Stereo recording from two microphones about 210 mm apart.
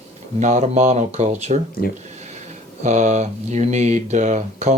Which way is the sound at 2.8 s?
35° right (ahead or behind).